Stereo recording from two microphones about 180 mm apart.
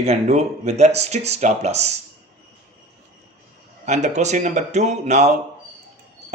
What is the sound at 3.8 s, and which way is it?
Speech, 40° right (ahead or behind).